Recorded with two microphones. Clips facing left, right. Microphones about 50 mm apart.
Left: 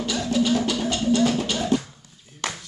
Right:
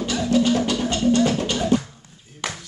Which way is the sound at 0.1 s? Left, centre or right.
Centre.